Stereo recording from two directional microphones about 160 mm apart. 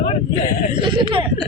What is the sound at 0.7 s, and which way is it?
Speech, 35° right (ahead or behind).